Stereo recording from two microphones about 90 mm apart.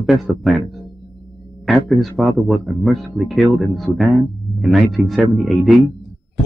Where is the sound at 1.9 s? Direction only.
Centre (ahead or behind).